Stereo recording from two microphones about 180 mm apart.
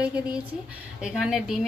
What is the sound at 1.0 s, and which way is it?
Speech, 5° right (ahead or behind).